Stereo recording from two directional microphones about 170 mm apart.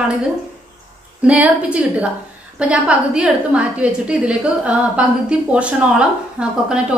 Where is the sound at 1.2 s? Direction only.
5° right (ahead or behind).